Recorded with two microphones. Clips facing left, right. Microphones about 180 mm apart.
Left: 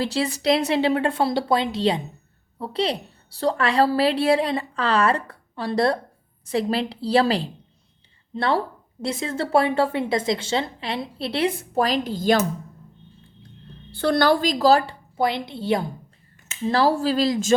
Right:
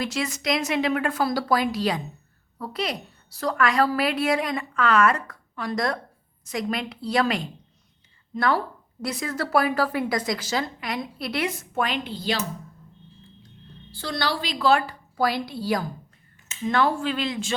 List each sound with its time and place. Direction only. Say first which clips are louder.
0.0 s a woman's voice: left 5 dB; 30° left (ahead or behind)
13.9 s a woman's voice: left 9 dB; 55° left (ahead or behind); by 14.9 s 35° left (ahead or behind)
15.1 s a woman's voice: left 1 dB; 20° left (ahead or behind)